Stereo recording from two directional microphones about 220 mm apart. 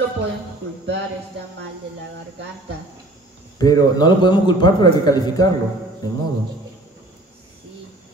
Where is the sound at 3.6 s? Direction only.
20° left (ahead or behind).